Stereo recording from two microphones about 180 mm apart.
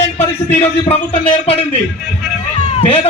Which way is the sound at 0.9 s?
30° left (ahead or behind).